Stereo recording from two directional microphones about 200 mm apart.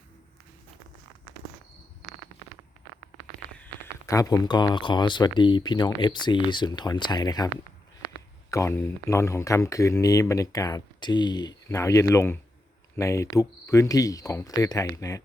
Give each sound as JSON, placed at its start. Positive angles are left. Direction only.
{"t": 3.6, "sound": "speech", "side_deg": 15}